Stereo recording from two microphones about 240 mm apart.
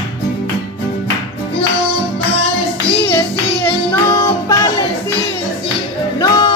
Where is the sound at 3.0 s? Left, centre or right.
Centre.